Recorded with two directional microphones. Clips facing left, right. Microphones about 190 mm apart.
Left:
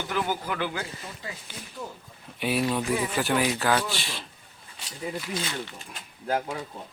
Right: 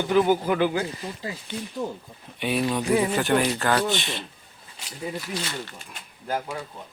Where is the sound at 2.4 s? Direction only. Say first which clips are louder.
Right 1 dB; 5° left (ahead or behind).